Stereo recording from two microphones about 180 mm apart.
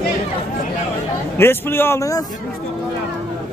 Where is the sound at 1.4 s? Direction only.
15° left (ahead or behind).